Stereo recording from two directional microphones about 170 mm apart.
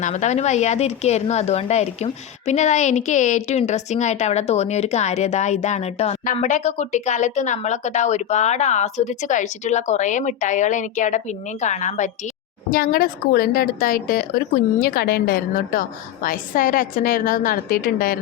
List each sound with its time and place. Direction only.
0.0 s a woman's voice: 45° left (ahead or behind)
12.7 s a woman's voice: 60° left (ahead or behind)